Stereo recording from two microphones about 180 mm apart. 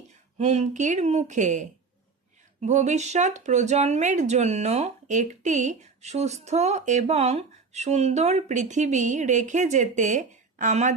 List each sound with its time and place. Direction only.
0.3 s speech: 40° right (ahead or behind)